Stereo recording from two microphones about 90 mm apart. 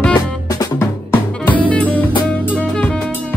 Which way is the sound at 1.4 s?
15° left (ahead or behind).